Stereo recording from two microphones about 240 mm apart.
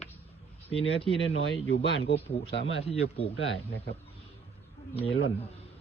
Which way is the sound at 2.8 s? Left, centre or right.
Left.